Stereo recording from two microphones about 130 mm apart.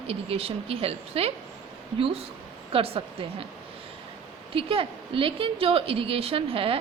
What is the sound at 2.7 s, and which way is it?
Speech, 45° right (ahead or behind).